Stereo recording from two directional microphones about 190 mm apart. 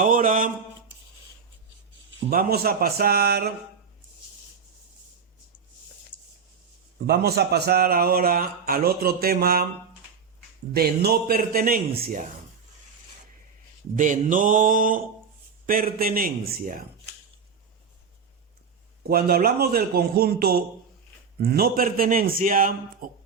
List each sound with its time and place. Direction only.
0.0 s a sound: 45° right (ahead or behind)
2.3 s speech: 50° right (ahead or behind)
7.1 s speech: 60° right (ahead or behind)
10.8 s speech: 55° right (ahead or behind)
13.9 s speech: 45° right (ahead or behind)
19.0 s speech: 50° right (ahead or behind)